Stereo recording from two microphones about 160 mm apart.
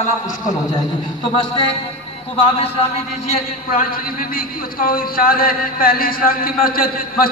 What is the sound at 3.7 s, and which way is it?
A man's voice, 65° left (ahead or behind).